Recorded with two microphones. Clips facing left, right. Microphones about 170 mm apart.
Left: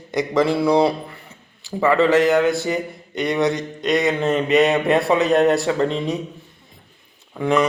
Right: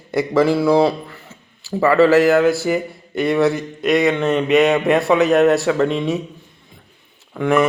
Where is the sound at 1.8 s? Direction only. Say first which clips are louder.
Right 3 dB; 20° left (ahead or behind).